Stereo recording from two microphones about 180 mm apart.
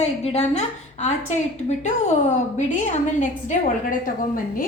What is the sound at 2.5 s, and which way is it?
A woman's voice, 40° left (ahead or behind).